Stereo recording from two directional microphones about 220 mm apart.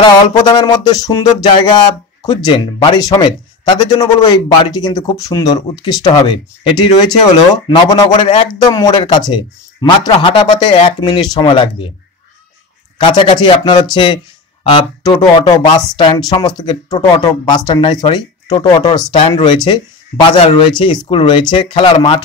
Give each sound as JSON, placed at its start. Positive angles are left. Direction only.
{"t": 0.0, "sound": "music", "side_deg": 20}
{"t": 12.9, "sound": "music", "side_deg": 20}
{"t": 13.9, "sound": "speech", "side_deg": 20}
{"t": 16.0, "sound": "music", "side_deg": 20}